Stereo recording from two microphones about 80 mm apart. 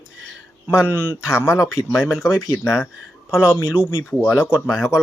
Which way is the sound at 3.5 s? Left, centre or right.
Left.